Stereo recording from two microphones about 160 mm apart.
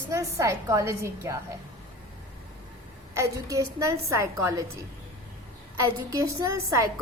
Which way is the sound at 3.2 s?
20° right (ahead or behind).